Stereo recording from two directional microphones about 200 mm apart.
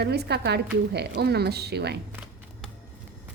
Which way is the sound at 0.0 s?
55° right (ahead or behind).